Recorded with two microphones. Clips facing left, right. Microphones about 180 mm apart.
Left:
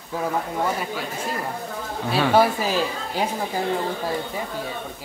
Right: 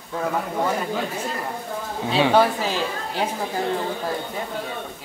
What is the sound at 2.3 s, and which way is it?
Speech, 10° left (ahead or behind).